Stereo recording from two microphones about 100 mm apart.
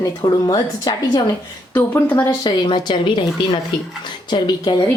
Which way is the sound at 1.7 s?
20° left (ahead or behind).